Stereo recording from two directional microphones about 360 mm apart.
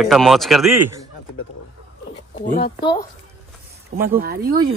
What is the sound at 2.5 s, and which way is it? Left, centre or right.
Speech, left.